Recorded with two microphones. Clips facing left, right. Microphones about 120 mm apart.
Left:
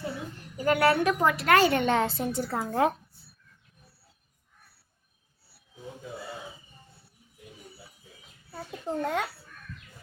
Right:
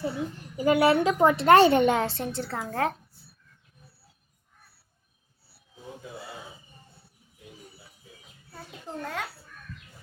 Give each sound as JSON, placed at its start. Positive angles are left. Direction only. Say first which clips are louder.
{"t": 0.5, "sound": "a woman's voice", "louder": "right 2 dB", "side_deg": -15}
{"t": 1.9, "sound": "a woman's voice", "louder": "even", "side_deg": 0}
{"t": 8.5, "sound": "a child's voice", "louder": "left 6 dB", "side_deg": 15}